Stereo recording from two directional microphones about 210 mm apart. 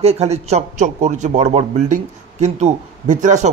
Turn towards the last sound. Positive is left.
turn(degrees=-35)  # may be behind; listen again after turning